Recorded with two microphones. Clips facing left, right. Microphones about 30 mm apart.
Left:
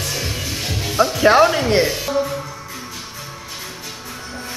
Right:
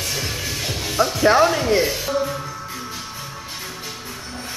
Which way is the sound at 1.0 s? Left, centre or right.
Left.